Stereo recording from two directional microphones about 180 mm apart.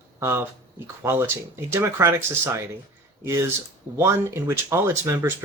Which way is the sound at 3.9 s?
15° right (ahead or behind).